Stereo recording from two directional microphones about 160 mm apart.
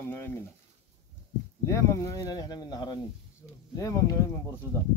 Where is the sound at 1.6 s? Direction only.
20° left (ahead or behind).